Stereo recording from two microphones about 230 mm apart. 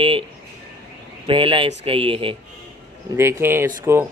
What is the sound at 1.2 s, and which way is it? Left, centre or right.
Speech, right.